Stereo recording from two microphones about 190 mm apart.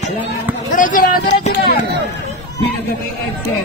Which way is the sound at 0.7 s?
45° left (ahead or behind).